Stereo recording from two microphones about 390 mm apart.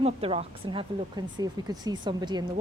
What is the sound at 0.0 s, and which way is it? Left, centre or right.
Speech, centre.